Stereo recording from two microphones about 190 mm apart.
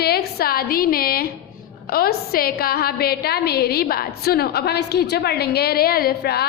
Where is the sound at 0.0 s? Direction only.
55° left (ahead or behind).